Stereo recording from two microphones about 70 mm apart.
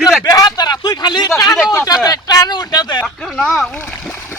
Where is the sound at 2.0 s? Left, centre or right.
Left.